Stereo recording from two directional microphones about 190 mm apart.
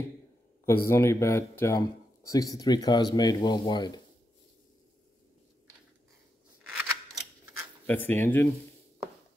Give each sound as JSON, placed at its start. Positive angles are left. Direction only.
{"t": 0.7, "sound": "speech", "side_deg": 15}
{"t": 6.7, "sound": "scissors", "side_deg": -5}
{"t": 7.8, "sound": "speech", "side_deg": 10}